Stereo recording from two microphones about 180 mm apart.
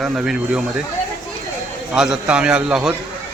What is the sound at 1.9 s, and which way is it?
Speech, 5° right (ahead or behind).